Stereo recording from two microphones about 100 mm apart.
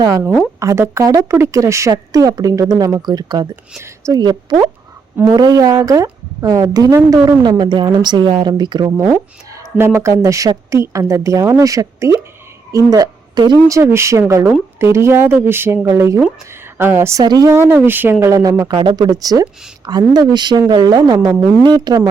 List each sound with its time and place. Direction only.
0.6 s speech: 30° right (ahead or behind); by 3.4 s 45° right (ahead or behind)
3.8 s a woman's voice: 30° right (ahead or behind)
4.2 s a woman's voice: 45° right (ahead or behind)
9.0 s a woman's voice: 20° right (ahead or behind); by 13.6 s 45° right (ahead or behind)
13.9 s speech: 25° right (ahead or behind)
17.2 s speech: 35° right (ahead or behind)
17.8 s speech: 20° right (ahead or behind)
18.7 s a woman's voice: 50° right (ahead or behind)